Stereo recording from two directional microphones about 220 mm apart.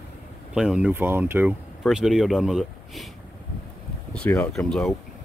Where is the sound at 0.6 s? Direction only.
5° right (ahead or behind).